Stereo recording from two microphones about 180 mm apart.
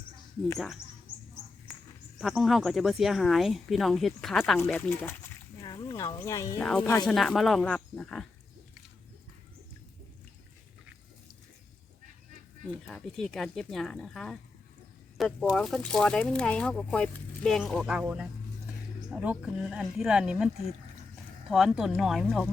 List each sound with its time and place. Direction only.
2.1 s speech: centre (ahead or behind)
4.5 s speech: 10° left (ahead or behind)
5.5 s a sound: 20° left (ahead or behind)
6.1 s speech: 20° left (ahead or behind)
6.6 s speech: 5° left (ahead or behind)
12.9 s speech: centre (ahead or behind)
21.5 s speech: centre (ahead or behind)